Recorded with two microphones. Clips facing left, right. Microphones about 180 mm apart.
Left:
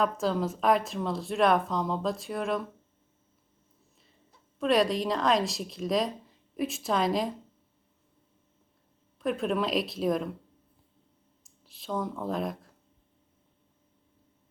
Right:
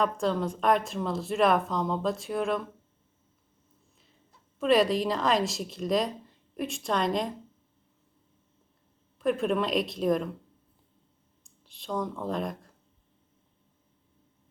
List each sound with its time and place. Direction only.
0.0 s a woman's voice: centre (ahead or behind)
4.6 s a woman's voice: centre (ahead or behind)
9.1 s a woman's voice: centre (ahead or behind)
11.4 s speech: centre (ahead or behind)